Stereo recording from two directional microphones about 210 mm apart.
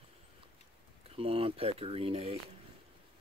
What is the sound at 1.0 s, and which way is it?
Speech, 25° right (ahead or behind).